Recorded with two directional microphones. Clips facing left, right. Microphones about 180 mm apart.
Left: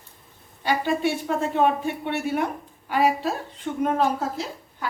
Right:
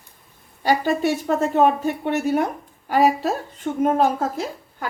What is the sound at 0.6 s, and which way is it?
Speech, 40° right (ahead or behind).